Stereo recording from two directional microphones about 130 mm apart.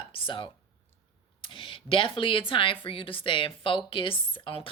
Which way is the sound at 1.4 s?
40° left (ahead or behind).